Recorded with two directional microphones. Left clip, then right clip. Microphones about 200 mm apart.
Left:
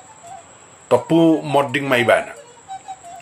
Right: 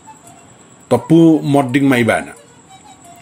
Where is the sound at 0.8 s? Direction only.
35° right (ahead or behind).